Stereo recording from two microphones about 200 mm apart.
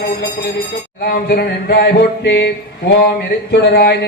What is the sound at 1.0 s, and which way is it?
Speech, 50° left (ahead or behind).